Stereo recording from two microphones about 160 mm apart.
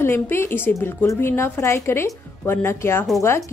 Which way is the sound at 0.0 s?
15° left (ahead or behind).